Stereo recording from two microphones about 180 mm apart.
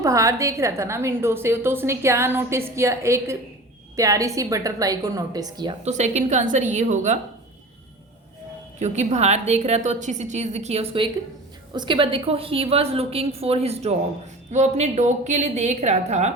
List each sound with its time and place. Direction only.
0.0 s a woman's voice: 15° right (ahead or behind)
5.8 s a woman's voice: 40° right (ahead or behind)
8.8 s a woman's voice: 40° right (ahead or behind)